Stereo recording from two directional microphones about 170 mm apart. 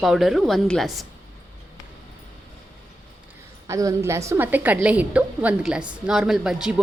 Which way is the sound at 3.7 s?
20° right (ahead or behind).